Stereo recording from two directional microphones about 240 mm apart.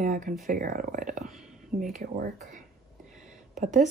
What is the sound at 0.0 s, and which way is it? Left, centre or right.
Speech, right.